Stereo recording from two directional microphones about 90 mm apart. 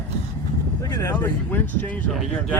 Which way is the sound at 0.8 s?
25° left (ahead or behind).